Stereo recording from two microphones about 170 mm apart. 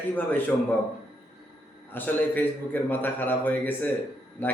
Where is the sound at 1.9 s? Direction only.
10° left (ahead or behind).